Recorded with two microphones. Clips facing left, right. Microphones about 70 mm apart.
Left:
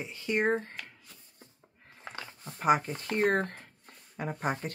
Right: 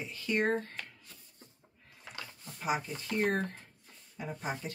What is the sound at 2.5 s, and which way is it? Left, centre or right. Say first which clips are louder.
Speech: left 8 dB; left.